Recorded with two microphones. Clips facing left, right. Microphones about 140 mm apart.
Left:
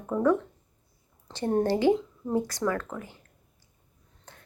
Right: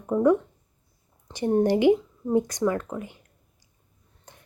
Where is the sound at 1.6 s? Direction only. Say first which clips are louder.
Right 4 dB; 15° right (ahead or behind).